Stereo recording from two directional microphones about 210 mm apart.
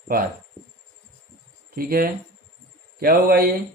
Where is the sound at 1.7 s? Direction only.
45° right (ahead or behind).